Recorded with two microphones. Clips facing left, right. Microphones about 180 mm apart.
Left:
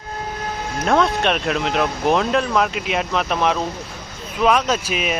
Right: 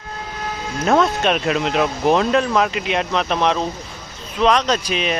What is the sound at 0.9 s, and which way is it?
Speech, centre (ahead or behind).